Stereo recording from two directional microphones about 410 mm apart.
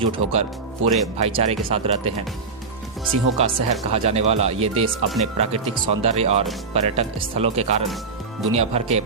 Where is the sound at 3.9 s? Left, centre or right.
Centre.